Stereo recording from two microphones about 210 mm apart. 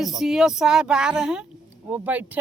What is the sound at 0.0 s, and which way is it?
A woman's voice, centre (ahead or behind).